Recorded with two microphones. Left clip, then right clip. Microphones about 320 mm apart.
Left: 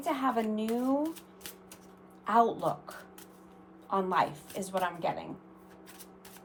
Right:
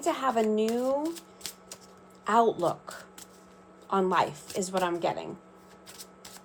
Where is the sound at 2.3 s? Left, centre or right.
Right.